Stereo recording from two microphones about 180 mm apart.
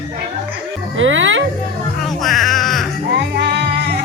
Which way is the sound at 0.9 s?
90° right.